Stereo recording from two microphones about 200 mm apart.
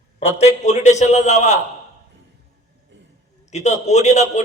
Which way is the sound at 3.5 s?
35° left (ahead or behind).